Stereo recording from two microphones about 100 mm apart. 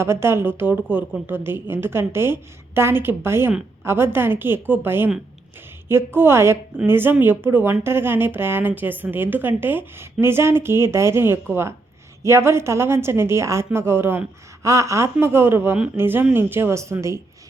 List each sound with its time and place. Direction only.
0.0 s speech: 25° right (ahead or behind)